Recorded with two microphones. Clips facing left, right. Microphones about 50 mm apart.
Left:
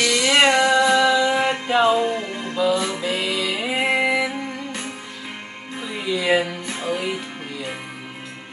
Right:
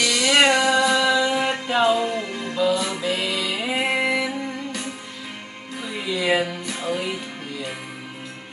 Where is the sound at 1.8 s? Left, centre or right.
Left.